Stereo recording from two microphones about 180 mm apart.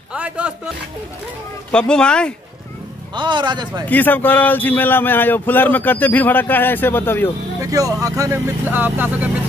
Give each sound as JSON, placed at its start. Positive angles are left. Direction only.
{"t": 0.1, "sound": "speech", "side_deg": -5}
{"t": 1.7, "sound": "speech", "side_deg": 5}
{"t": 3.2, "sound": "a man's voice", "side_deg": -25}
{"t": 3.9, "sound": "a man's voice", "side_deg": 10}
{"t": 7.6, "sound": "speech", "side_deg": -20}